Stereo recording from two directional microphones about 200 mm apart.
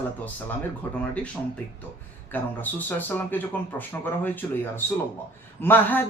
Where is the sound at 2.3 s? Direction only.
10° left (ahead or behind).